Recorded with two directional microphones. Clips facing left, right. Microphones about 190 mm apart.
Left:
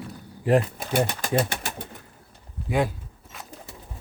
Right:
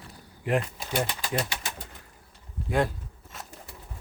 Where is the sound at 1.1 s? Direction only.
50° left (ahead or behind).